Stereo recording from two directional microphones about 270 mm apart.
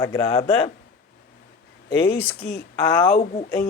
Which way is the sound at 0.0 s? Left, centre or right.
Centre.